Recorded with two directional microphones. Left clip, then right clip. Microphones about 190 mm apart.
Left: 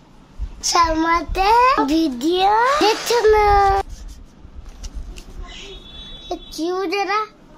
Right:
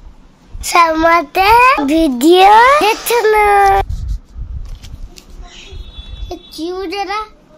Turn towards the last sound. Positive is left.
turn(degrees=5)  # may be behind; listen again after turning